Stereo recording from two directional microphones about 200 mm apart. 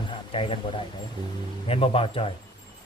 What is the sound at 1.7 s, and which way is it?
Speech, 25° left (ahead or behind).